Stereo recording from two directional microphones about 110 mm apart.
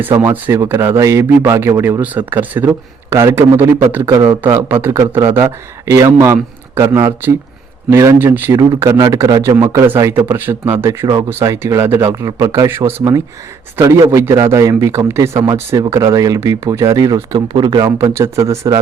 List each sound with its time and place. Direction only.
0.0 s speech: 20° right (ahead or behind)
8.5 s speech: 35° right (ahead or behind)
9.6 s speech: 25° right (ahead or behind)
11.0 s speech: 40° right (ahead or behind)
11.3 s speech: 25° right (ahead or behind); by 17.9 s 40° right (ahead or behind)
17.9 s speech: 25° right (ahead or behind)